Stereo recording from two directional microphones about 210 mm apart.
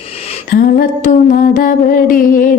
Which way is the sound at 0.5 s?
40° left (ahead or behind).